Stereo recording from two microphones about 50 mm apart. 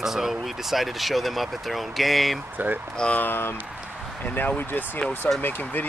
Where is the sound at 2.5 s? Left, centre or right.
Right.